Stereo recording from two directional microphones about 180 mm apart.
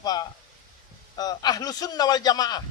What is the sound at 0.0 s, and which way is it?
A man's voice, 20° left (ahead or behind).